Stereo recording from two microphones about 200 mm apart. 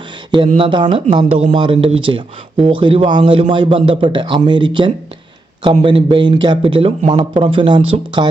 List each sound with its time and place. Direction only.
0.4 s speech: 30° right (ahead or behind)